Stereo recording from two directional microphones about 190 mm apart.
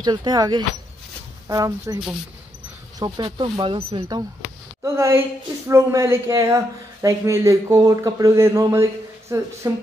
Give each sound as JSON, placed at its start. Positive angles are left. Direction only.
{"t": 0.0, "sound": "speech", "side_deg": -20}
{"t": 3.0, "sound": "speech", "side_deg": -25}